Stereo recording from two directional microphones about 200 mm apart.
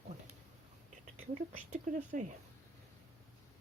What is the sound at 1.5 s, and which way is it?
Speech, 40° right (ahead or behind).